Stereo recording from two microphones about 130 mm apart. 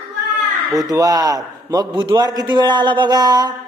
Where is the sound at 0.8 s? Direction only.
30° right (ahead or behind).